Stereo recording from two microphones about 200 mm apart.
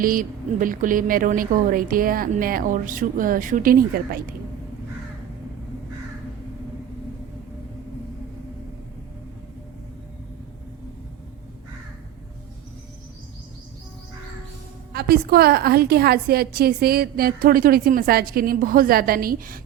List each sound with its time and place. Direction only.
0.0 s a woman's voice: 45° right (ahead or behind)
14.9 s a woman's voice: 50° right (ahead or behind)